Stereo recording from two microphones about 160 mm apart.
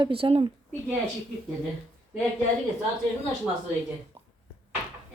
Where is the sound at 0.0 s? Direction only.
35° right (ahead or behind).